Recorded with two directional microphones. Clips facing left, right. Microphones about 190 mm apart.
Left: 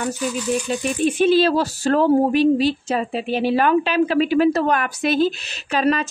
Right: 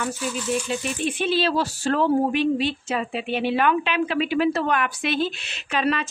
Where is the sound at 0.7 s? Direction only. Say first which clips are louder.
Left 6 dB; 45° left (ahead or behind).